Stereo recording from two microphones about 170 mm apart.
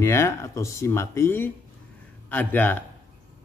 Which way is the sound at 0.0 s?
15° left (ahead or behind).